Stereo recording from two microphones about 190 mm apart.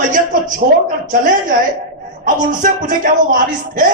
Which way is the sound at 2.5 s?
45° right (ahead or behind).